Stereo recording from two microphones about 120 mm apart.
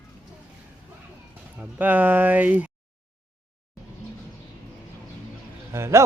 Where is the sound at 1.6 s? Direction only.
15° right (ahead or behind).